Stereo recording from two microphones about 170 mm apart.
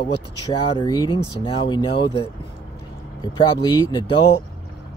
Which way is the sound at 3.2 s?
25° left (ahead or behind).